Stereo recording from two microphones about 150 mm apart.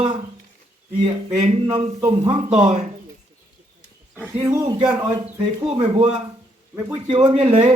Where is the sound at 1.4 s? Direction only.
50° right (ahead or behind).